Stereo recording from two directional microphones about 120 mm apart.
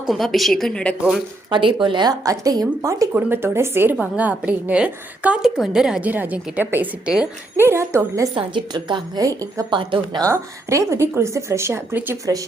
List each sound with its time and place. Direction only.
0.0 s a woman's voice: centre (ahead or behind)
1.5 s a woman's voice: 40° right (ahead or behind); by 7.3 s 10° right (ahead or behind)
7.5 s a woman's voice: 20° right (ahead or behind)
8.4 s a woman's voice: 40° right (ahead or behind)
10.2 s a woman's voice: 25° right (ahead or behind)